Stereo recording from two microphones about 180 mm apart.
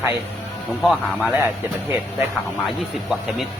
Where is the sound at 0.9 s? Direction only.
5° right (ahead or behind).